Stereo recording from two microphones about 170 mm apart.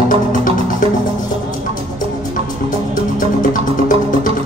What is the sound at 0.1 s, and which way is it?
Music, 50° left (ahead or behind).